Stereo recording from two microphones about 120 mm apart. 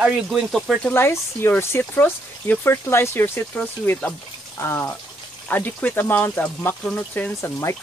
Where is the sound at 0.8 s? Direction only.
20° left (ahead or behind).